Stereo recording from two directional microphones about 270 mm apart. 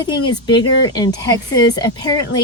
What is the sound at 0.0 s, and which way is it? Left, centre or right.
A woman's voice, centre.